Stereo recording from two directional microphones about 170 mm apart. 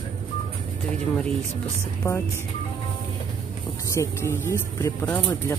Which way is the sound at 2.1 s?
15° left (ahead or behind).